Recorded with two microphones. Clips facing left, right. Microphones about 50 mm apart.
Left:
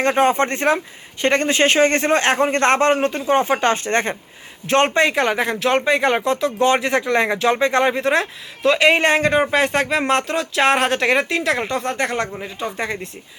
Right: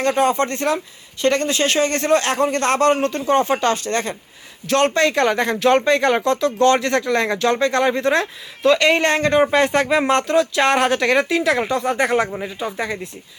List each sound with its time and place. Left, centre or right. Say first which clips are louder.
0.0 s a man's voice: left 1 dB; left
5.1 s speech: right 1 dB; centre